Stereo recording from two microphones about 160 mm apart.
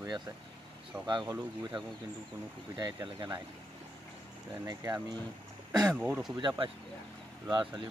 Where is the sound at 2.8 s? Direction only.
25° right (ahead or behind).